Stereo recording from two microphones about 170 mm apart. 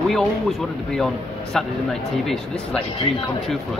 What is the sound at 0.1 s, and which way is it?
Speech, centre (ahead or behind).